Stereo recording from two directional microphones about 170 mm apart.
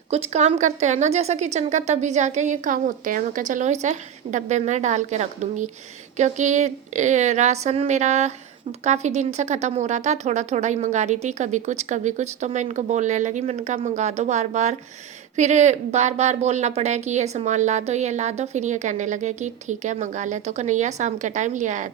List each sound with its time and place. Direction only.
0.1 s a woman's voice: 40° right (ahead or behind)